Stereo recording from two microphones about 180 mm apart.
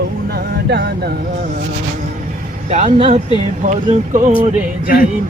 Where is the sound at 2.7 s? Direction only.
40° right (ahead or behind).